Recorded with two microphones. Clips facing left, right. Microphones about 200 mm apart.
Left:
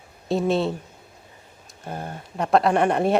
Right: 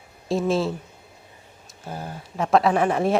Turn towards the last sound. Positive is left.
turn(degrees=0)  # may be behind; listen again after turning